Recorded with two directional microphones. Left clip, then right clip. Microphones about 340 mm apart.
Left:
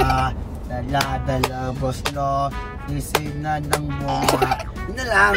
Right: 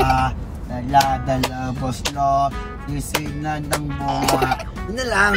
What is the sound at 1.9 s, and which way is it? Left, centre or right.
Music, centre.